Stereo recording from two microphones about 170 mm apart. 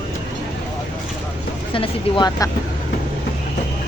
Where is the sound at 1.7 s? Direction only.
30° left (ahead or behind).